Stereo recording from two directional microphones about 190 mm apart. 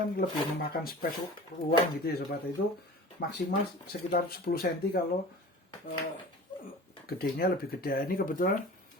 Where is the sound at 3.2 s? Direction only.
55° left (ahead or behind).